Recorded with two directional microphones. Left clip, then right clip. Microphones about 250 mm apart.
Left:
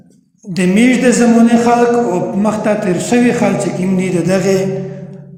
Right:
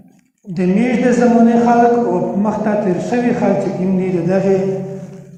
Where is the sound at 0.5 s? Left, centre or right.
Left.